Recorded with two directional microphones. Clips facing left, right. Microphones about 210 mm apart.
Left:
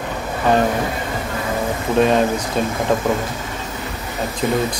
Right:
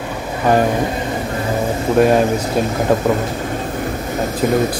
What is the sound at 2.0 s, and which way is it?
Speech, 10° right (ahead or behind).